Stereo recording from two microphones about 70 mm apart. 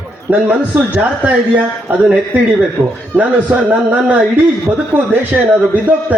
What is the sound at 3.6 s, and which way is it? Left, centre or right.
A man's voice, right.